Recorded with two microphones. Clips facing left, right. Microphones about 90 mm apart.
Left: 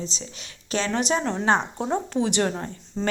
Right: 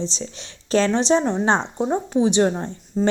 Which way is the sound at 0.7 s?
35° right (ahead or behind).